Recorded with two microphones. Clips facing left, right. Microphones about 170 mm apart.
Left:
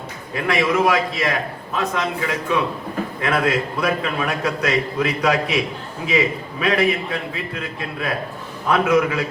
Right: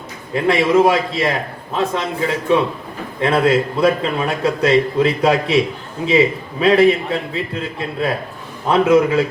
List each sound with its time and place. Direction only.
0.3 s a man's voice: 30° right (ahead or behind)